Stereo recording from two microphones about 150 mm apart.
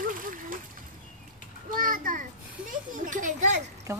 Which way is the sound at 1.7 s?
65° right (ahead or behind).